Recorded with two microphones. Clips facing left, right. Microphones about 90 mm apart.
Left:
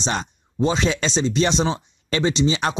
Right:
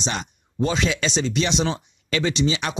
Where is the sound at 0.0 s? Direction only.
35° left (ahead or behind).